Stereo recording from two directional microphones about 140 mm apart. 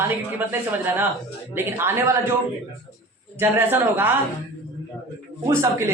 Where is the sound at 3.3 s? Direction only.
15° right (ahead or behind).